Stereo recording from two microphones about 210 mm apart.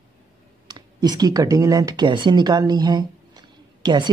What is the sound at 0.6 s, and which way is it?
Speech, 20° right (ahead or behind).